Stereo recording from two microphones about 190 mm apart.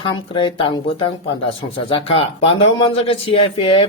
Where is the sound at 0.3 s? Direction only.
25° left (ahead or behind).